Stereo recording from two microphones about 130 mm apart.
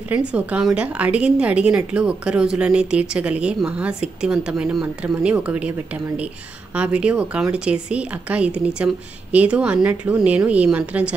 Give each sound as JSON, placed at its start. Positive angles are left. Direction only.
{"t": 0.1, "sound": "a woman's voice", "side_deg": -10}
{"t": 6.7, "sound": "a woman's voice", "side_deg": -10}